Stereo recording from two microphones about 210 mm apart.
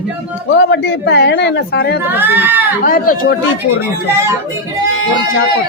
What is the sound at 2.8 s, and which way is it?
Speech, 40° left (ahead or behind).